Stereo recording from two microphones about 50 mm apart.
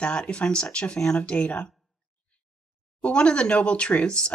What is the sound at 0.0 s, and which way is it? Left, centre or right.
Speech, centre.